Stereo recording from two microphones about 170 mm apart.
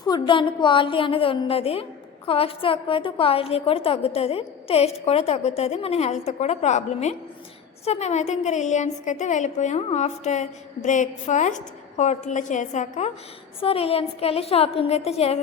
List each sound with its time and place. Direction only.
0.0 s a woman's voice: 25° left (ahead or behind); by 13.1 s 45° left (ahead or behind)
13.6 s a woman's voice: 35° left (ahead or behind)